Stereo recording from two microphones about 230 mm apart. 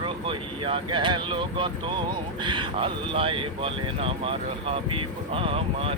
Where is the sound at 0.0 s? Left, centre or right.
Right.